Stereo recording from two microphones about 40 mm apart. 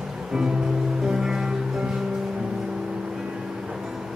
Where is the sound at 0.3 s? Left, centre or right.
Centre.